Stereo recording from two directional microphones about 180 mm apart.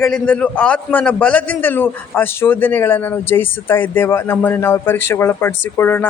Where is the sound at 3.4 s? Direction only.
90° left.